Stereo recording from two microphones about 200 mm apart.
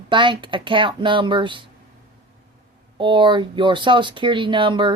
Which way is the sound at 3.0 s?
25° right (ahead or behind).